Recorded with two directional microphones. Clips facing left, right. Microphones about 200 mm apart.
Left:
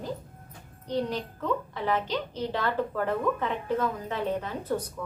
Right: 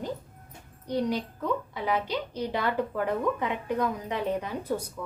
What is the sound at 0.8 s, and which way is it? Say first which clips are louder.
A child's voice: right 1 dB; 10° right (ahead or behind).